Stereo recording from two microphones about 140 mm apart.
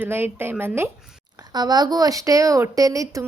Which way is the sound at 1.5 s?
30° right (ahead or behind).